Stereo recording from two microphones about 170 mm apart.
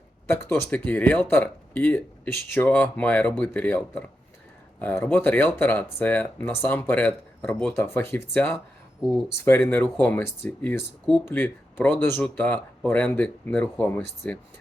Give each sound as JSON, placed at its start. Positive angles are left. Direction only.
{"t": 0.3, "sound": "speech", "side_deg": 10}